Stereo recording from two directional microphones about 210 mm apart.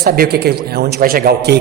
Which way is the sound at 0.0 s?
50° right (ahead or behind).